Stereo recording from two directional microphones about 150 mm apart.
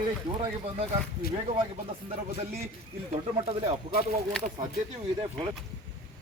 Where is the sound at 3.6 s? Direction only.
45° right (ahead or behind).